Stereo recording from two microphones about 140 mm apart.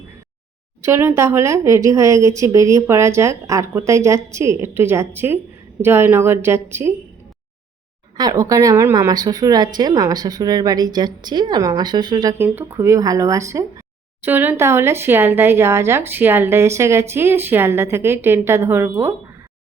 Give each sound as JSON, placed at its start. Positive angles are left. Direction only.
{"t": 0.8, "sound": "speech", "side_deg": -20}
{"t": 8.2, "sound": "speech", "side_deg": -25}
{"t": 12.5, "sound": "speech", "side_deg": -20}